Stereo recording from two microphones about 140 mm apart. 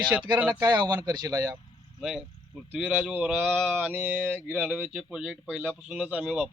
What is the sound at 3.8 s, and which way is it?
Speech, 10° right (ahead or behind).